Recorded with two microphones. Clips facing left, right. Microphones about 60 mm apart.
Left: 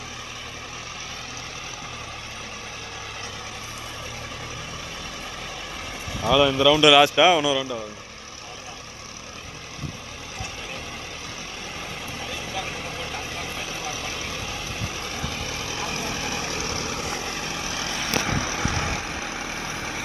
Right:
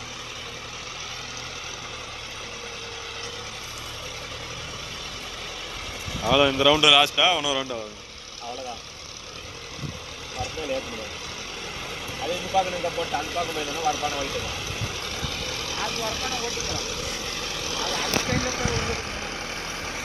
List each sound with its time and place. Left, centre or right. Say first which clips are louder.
6.1 s speech: left 1 dB; centre
7.4 s speech: left 3 dB; centre
12.3 s vehicle: right 10 dB; centre
16.4 s vehicle: left 1 dB; left